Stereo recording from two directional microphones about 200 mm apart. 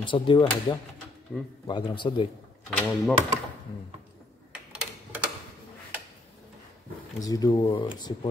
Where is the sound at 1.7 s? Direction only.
25° left (ahead or behind).